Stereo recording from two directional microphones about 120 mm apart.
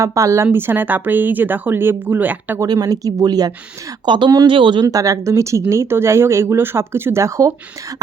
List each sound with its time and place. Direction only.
0.0 s speech: 25° right (ahead or behind)
2.6 s speech: 30° right (ahead or behind)
4.9 s speech: 30° right (ahead or behind)